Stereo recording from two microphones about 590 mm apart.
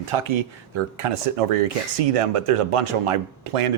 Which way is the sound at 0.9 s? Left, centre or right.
Right.